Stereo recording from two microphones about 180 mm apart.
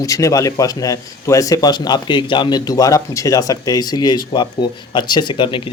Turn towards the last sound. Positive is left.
turn(degrees=25)  # may be behind; listen again after turning